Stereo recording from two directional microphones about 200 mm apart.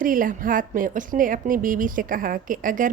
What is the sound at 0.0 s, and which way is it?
A woman's voice, 45° right (ahead or behind).